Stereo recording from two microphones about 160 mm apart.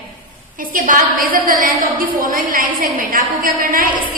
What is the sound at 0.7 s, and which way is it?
A woman's voice, 60° right (ahead or behind).